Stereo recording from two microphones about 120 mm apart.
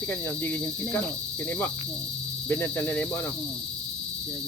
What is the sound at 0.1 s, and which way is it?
Speech, 15° left (ahead or behind).